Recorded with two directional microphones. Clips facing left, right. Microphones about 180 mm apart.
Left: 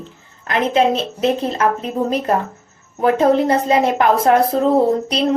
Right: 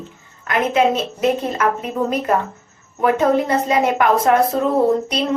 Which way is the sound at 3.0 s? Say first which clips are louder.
Left 2 dB; 30° left (ahead or behind).